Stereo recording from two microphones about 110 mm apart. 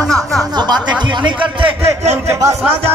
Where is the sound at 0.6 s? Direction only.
40° right (ahead or behind).